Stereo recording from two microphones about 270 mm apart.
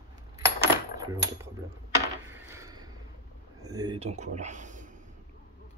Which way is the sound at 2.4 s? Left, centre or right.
Centre.